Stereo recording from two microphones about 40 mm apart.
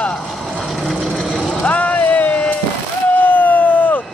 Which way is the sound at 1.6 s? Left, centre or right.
Left.